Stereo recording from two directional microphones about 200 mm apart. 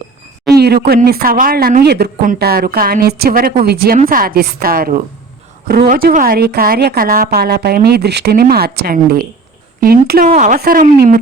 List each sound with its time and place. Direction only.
0.5 s speech: 55° right (ahead or behind)